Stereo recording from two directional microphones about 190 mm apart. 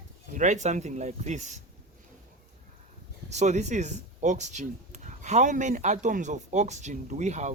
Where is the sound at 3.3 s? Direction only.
35° right (ahead or behind).